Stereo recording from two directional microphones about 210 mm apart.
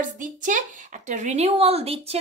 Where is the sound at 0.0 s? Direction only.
35° right (ahead or behind).